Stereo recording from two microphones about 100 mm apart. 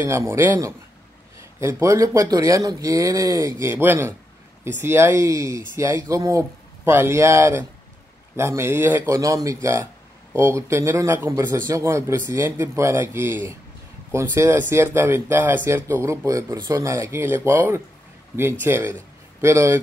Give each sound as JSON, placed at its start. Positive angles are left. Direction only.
{"t": 0.0, "sound": "speech", "side_deg": -30}